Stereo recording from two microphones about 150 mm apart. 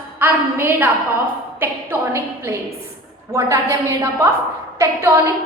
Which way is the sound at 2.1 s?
15° right (ahead or behind).